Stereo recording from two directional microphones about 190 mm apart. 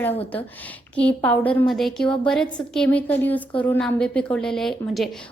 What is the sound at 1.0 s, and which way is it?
A woman's voice, 5° left (ahead or behind).